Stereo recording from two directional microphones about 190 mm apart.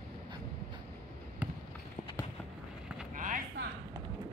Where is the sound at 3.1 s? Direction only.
45° right (ahead or behind).